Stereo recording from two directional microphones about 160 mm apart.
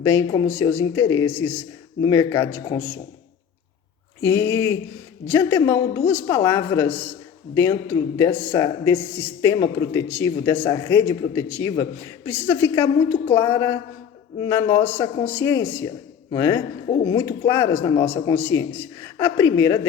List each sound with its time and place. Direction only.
0.0 s a woman's voice: 15° left (ahead or behind)
4.2 s a woman's voice: 15° left (ahead or behind)